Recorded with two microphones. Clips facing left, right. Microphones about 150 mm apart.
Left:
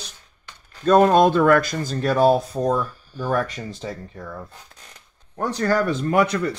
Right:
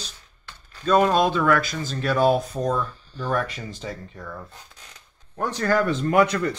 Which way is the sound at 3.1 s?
10° left (ahead or behind).